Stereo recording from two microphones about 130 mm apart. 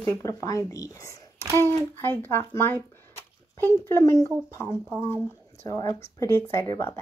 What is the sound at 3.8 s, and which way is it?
Speech, 25° left (ahead or behind).